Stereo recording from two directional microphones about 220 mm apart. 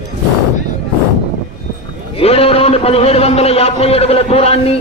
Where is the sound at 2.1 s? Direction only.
25° left (ahead or behind).